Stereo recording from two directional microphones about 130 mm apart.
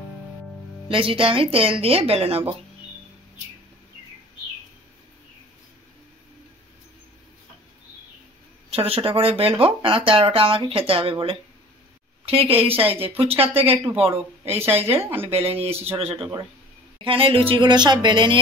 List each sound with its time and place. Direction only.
0.8 s speech: 45° right (ahead or behind)
8.7 s speech: 45° right (ahead or behind)
15.0 s speech: 15° right (ahead or behind)
15.2 s a woman's voice: 50° right (ahead or behind)